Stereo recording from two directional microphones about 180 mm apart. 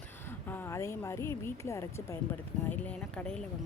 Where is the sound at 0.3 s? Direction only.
10° left (ahead or behind).